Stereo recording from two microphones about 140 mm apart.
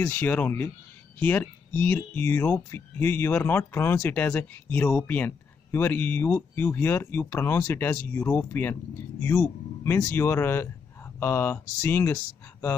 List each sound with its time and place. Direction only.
0.0 s speech: 10° left (ahead or behind)